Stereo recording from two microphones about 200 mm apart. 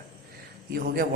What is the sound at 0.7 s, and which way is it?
Speech, 50° right (ahead or behind).